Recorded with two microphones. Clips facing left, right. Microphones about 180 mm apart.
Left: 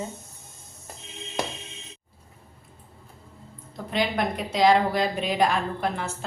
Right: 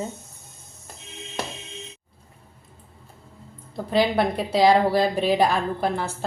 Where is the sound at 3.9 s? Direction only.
30° right (ahead or behind).